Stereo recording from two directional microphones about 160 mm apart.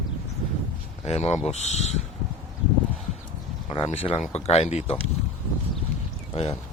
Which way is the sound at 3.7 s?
35° left (ahead or behind).